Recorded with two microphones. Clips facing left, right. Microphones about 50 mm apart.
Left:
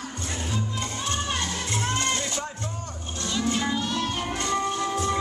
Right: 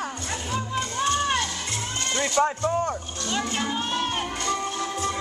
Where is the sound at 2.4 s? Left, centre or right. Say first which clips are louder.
Right 12 dB; right.